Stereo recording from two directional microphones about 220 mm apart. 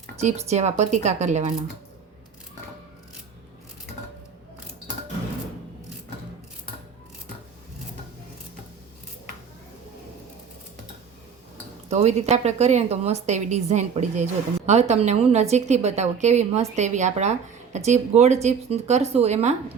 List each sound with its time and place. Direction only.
0.2 s a woman's voice: 30° right (ahead or behind)
11.9 s a woman's voice: 30° right (ahead or behind)